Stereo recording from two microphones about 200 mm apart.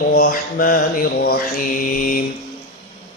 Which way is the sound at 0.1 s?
45° left (ahead or behind).